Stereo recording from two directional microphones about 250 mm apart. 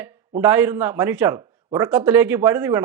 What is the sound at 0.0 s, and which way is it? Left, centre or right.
Speech, centre.